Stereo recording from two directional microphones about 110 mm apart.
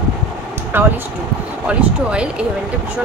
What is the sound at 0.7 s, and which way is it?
Speech, 20° right (ahead or behind).